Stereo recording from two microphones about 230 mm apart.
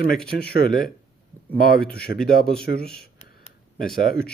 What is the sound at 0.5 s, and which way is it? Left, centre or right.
Speech, left.